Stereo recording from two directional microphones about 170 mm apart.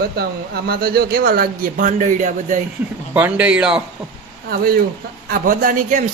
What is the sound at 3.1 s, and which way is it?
Speech, 10° right (ahead or behind).